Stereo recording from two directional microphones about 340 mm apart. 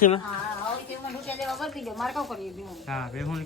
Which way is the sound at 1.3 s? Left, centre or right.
Centre.